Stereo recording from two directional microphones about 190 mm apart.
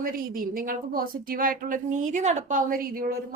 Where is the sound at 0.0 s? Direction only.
50° right (ahead or behind).